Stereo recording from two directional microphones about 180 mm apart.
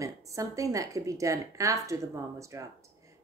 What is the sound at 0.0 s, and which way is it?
A woman's voice, 20° right (ahead or behind).